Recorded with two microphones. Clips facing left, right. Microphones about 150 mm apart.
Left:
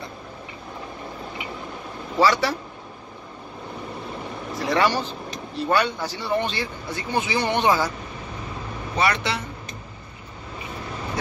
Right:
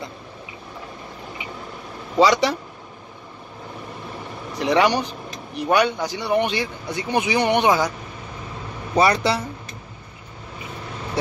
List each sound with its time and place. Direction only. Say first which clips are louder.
2.1 s speech: right 3 dB; 15° right (ahead or behind)
4.6 s speech: right 3 dB; 15° right (ahead or behind)
8.9 s speech: right 6 dB; 35° right (ahead or behind)